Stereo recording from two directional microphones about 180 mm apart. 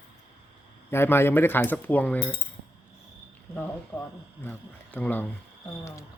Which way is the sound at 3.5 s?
10° left (ahead or behind).